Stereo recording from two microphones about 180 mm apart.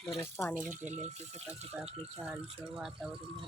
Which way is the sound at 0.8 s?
40° right (ahead or behind).